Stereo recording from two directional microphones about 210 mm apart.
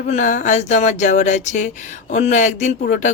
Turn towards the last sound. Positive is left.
turn(degrees=40)  # may be behind; listen again after turning